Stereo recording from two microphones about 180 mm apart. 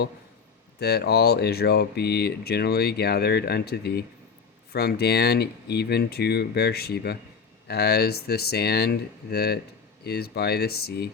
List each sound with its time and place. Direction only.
0.8 s speech: 65° left (ahead or behind)